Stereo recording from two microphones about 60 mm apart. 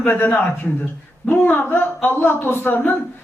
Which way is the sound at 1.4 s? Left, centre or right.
Left.